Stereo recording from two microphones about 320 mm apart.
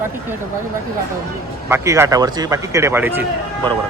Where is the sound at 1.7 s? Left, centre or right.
Centre.